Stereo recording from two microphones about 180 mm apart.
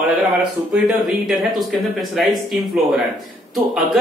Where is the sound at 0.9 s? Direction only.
Centre (ahead or behind).